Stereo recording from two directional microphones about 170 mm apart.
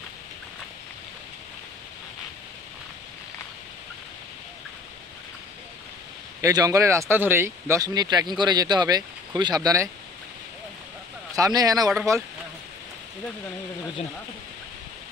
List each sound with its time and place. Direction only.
6.4 s speech: 20° right (ahead or behind)
11.3 s speech: 20° right (ahead or behind)